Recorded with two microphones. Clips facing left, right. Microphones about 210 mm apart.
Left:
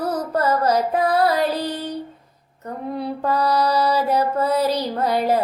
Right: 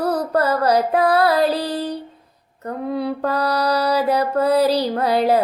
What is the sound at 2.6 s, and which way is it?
Mantra, 70° right (ahead or behind).